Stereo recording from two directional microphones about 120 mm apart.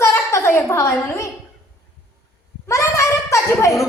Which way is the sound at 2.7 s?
25° left (ahead or behind).